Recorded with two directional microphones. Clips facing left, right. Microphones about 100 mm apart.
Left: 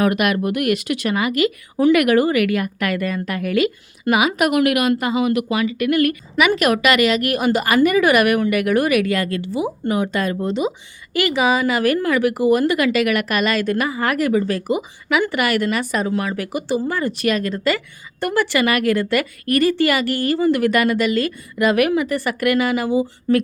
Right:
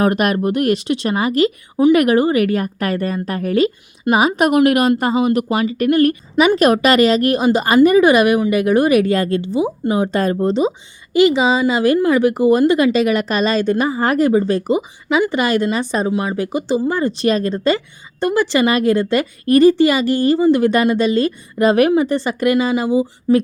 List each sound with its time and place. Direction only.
0.0 s speech: 35° right (ahead or behind)
1.7 s a woman's voice: 15° right (ahead or behind)
9.6 s speech: 15° right (ahead or behind)
9.9 s speech: 30° right (ahead or behind)
11.1 s a woman's voice: 20° right (ahead or behind)